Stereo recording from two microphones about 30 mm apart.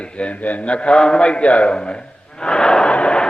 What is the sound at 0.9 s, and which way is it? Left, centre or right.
Mantra, left.